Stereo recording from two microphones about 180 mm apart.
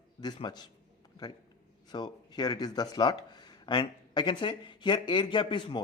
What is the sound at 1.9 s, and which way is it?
A man's voice, 25° left (ahead or behind).